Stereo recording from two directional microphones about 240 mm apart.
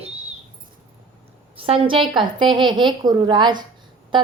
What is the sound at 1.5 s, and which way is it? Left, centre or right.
A woman's voice, right.